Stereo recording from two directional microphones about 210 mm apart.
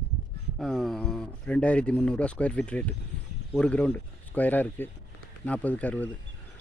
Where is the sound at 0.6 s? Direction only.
Centre (ahead or behind).